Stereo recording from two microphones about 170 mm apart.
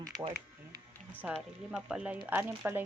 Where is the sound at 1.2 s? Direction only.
5° right (ahead or behind).